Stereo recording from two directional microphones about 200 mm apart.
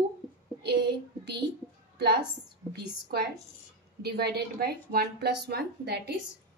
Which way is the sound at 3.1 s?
50° right (ahead or behind).